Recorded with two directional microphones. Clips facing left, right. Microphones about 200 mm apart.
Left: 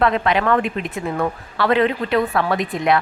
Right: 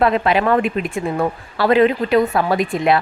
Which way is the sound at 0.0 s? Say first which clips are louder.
Right 2 dB; 20° right (ahead or behind).